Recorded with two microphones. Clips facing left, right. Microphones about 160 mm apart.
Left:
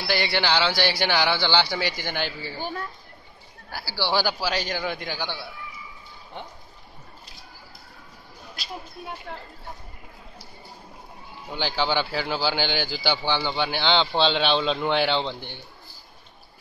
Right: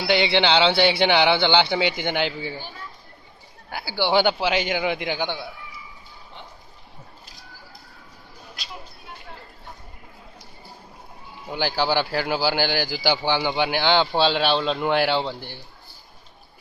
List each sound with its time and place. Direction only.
0.0 s speech: 20° right (ahead or behind)
3.9 s speech: 20° right (ahead or behind)
11.5 s speech: 10° right (ahead or behind)